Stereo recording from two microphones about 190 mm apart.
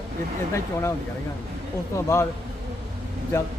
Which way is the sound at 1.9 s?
15° left (ahead or behind).